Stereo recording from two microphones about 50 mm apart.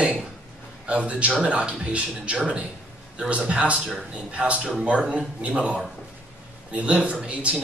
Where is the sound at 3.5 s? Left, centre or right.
Right.